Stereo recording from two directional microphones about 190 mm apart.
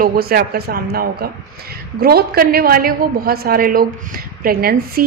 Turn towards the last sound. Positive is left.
turn(degrees=-50)  # may be behind; listen again after turning